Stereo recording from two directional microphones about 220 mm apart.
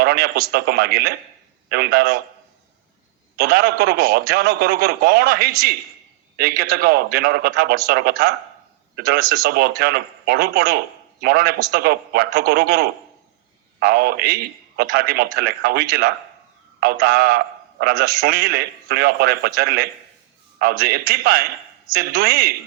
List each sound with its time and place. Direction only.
0.0 s a man's voice: 45° right (ahead or behind)
3.3 s a man's voice: 45° right (ahead or behind)